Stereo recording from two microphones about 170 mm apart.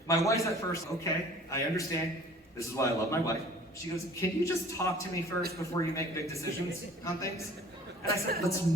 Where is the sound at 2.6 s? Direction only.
15° left (ahead or behind).